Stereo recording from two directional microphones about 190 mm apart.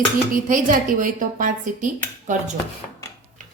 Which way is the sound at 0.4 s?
45° right (ahead or behind).